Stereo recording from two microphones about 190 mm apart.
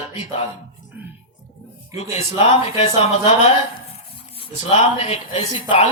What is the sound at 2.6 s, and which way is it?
Speech, 30° left (ahead or behind).